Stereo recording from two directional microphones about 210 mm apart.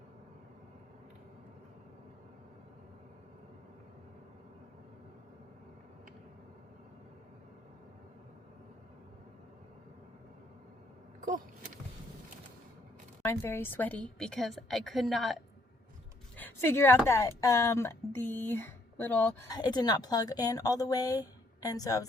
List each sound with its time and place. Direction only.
13.2 s a woman's voice: 10° left (ahead or behind)
16.4 s a woman's voice: 10° left (ahead or behind)